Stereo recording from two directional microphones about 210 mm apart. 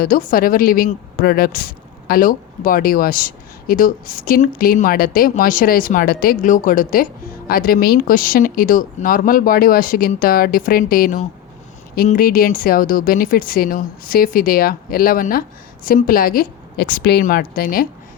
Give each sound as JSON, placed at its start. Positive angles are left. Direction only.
{"t": 0.0, "sound": "speech", "side_deg": 40}